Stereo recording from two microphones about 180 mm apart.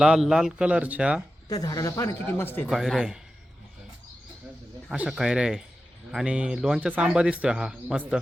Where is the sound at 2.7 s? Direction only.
Centre (ahead or behind).